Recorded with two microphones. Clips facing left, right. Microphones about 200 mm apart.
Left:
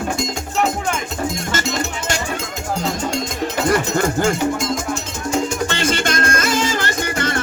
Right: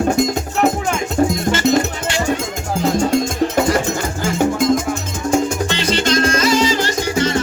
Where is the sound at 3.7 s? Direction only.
55° left (ahead or behind).